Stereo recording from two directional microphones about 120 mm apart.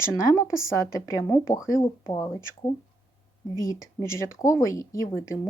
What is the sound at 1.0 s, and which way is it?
A woman's voice, 25° left (ahead or behind).